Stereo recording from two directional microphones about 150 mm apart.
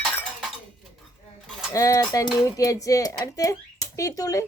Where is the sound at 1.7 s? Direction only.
20° left (ahead or behind).